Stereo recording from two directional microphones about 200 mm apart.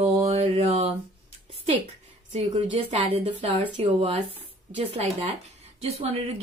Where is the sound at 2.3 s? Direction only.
25° right (ahead or behind).